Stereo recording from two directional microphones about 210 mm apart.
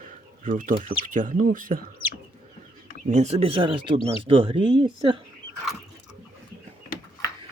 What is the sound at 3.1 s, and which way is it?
Speech, 30° right (ahead or behind).